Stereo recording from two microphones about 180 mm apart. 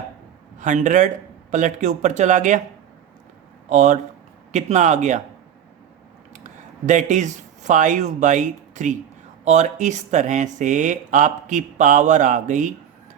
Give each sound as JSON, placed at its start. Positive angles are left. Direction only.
{"t": 0.6, "sound": "speech", "side_deg": -45}
{"t": 3.7, "sound": "speech", "side_deg": -45}
{"t": 6.3, "sound": "speech", "side_deg": -45}